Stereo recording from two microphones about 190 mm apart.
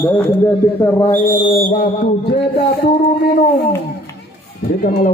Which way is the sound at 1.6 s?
45° left (ahead or behind).